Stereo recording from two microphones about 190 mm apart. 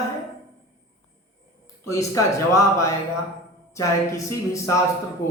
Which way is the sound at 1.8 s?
15° left (ahead or behind).